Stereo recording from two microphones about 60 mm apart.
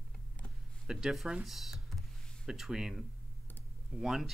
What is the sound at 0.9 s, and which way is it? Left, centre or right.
Speech, centre.